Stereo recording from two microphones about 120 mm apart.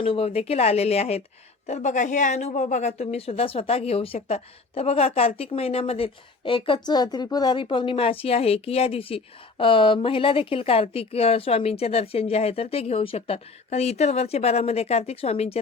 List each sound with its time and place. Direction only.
0.0 s a woman's voice: 50° left (ahead or behind)
1.6 s a woman's voice: 75° left (ahead or behind); by 15.6 s 60° left (ahead or behind)